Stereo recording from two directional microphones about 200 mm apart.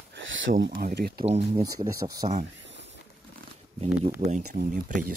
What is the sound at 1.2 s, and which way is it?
Speech, 30° right (ahead or behind).